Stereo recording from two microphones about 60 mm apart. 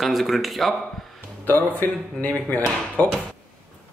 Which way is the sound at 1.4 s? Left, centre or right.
Left.